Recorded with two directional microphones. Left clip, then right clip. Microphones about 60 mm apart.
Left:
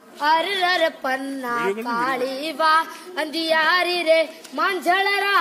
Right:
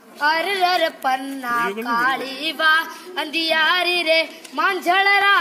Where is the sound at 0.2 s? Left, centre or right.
Left.